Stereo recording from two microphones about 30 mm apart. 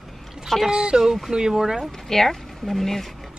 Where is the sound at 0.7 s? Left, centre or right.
Right.